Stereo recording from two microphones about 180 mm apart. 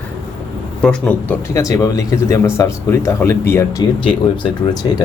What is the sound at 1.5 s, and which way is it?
Speech, 20° left (ahead or behind).